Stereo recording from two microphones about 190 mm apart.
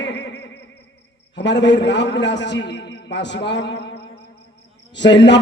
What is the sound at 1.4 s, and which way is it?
A man's voice, 65° left (ahead or behind).